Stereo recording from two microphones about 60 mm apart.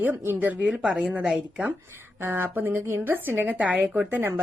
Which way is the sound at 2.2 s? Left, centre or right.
Right.